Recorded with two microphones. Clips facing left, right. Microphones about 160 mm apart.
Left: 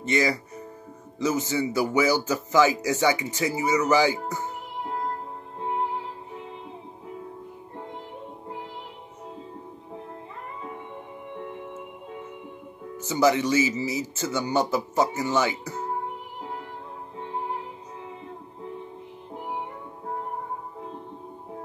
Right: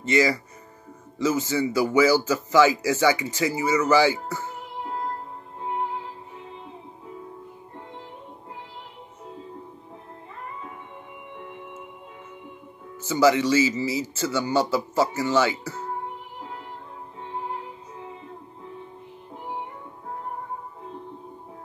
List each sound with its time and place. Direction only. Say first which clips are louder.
0.0 s speech: right 3 dB; 20° left (ahead or behind)
12.9 s speech: right 2 dB; 20° left (ahead or behind)